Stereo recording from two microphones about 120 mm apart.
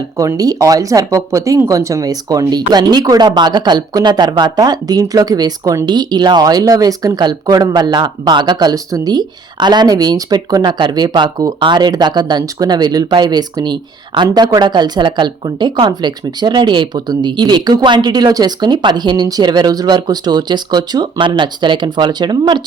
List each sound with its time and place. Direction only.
0.2 s speech: 30° right (ahead or behind)